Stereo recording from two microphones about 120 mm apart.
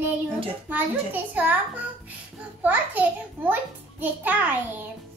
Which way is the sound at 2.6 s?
15° right (ahead or behind).